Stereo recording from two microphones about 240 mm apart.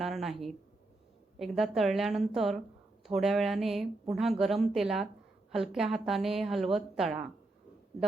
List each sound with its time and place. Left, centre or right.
0.0 s a woman's voice: centre